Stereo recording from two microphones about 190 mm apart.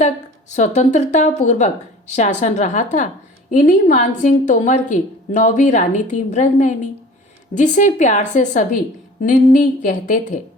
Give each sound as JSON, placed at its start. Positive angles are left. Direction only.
{"t": 0.5, "sound": "a woman's voice", "side_deg": 40}